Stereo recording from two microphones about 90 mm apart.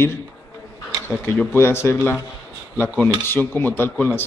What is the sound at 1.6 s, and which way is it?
Speech, 25° left (ahead or behind).